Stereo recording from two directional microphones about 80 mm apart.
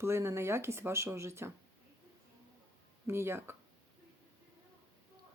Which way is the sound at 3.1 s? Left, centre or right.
Right.